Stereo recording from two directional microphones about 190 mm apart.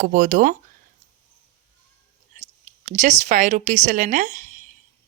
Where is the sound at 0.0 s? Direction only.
45° right (ahead or behind).